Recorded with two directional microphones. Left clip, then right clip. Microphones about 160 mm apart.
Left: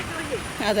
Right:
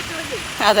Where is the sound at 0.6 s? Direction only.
5° left (ahead or behind).